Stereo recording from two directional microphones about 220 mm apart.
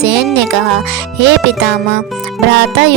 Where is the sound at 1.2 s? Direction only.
55° right (ahead or behind).